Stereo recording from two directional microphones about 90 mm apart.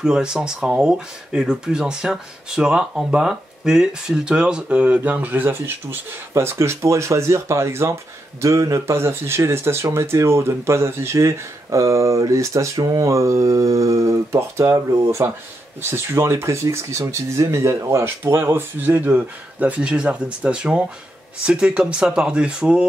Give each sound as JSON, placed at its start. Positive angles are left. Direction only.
{"t": 0.0, "sound": "speech", "side_deg": -5}